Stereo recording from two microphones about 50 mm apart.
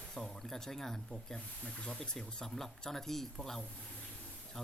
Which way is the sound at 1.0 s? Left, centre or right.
Left.